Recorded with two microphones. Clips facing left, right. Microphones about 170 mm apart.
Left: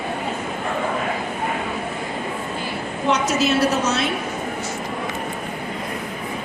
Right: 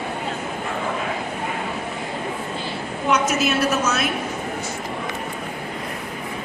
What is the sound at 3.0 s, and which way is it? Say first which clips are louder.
A woman's voice: left 1 dB; 35° left (ahead or behind).